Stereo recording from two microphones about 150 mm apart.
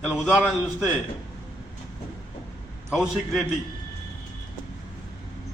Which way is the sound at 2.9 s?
5° right (ahead or behind).